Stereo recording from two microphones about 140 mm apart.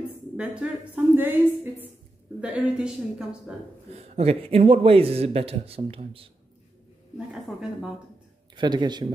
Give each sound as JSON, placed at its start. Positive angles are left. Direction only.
{"t": 0.4, "sound": "a woman's voice", "side_deg": -10}
{"t": 3.9, "sound": "a man's voice", "side_deg": -45}
{"t": 8.5, "sound": "a man's voice", "side_deg": -30}